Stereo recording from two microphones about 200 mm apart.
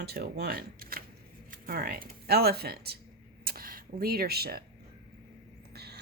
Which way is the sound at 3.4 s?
45° right (ahead or behind).